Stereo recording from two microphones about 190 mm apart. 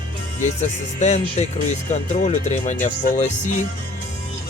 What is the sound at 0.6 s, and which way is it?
Speech, 35° left (ahead or behind).